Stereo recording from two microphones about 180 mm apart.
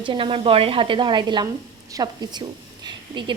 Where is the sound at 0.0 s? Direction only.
30° right (ahead or behind).